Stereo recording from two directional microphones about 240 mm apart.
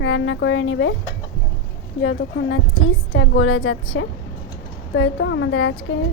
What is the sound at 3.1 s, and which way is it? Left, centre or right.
A woman's voice, left.